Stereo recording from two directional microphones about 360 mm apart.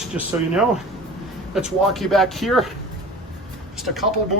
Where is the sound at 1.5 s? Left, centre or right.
Centre.